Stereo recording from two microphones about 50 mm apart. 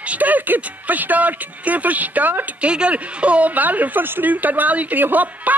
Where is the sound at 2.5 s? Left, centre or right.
Right.